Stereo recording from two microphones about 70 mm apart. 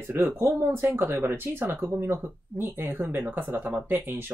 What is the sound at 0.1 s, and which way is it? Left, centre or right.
Speech, right.